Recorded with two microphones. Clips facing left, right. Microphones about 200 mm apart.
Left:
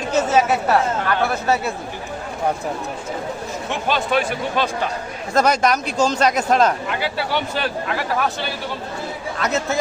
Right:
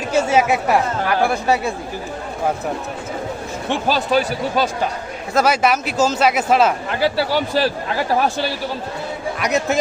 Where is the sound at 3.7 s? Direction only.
35° right (ahead or behind).